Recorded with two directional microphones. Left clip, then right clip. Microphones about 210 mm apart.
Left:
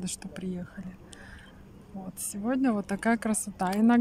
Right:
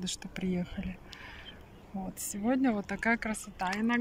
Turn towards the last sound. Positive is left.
turn(degrees=15)  # may be behind; listen again after turning